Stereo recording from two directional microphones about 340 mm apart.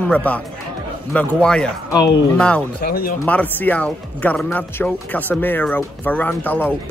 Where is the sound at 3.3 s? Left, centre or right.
Centre.